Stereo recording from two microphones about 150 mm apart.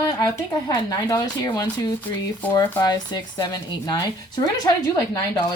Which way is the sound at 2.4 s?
10° left (ahead or behind).